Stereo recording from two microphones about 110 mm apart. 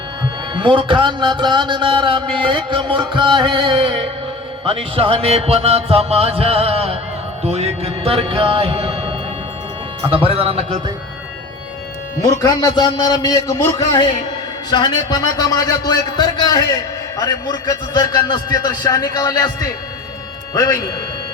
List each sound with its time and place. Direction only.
0.5 s music: 50° right (ahead or behind)
10.2 s music: 55° right (ahead or behind)
12.4 s a man's voice: 35° left (ahead or behind)